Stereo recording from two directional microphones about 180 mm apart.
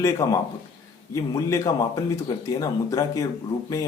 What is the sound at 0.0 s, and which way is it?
A man's voice, 20° left (ahead or behind).